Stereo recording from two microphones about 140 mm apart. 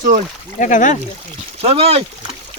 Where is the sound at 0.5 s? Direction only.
65° left (ahead or behind).